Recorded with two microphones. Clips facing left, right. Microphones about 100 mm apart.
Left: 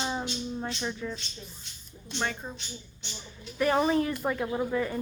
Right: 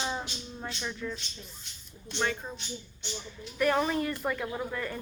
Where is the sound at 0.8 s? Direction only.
15° left (ahead or behind).